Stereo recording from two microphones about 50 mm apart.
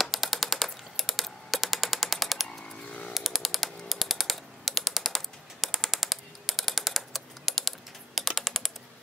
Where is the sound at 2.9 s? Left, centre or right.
Left.